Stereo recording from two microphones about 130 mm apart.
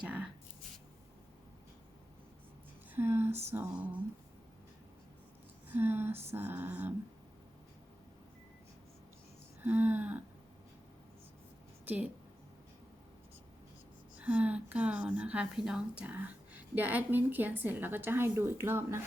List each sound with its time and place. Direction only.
0.0 s writing: 10° right (ahead or behind)
2.9 s a woman's voice: 15° right (ahead or behind)
5.7 s a woman's voice: 15° right (ahead or behind)
9.6 s a woman's voice: 15° right (ahead or behind)
14.2 s a woman's voice: 10° right (ahead or behind)